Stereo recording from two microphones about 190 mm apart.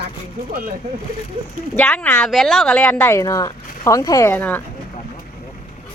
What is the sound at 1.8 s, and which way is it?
Speech, 10° left (ahead or behind).